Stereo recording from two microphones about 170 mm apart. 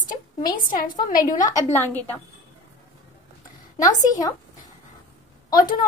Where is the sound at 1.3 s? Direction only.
20° left (ahead or behind).